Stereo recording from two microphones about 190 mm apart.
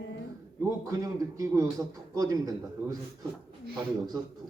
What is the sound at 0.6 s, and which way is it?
A man's voice, 15° right (ahead or behind).